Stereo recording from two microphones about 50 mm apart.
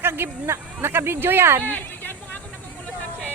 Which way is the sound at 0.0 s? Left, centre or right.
Right.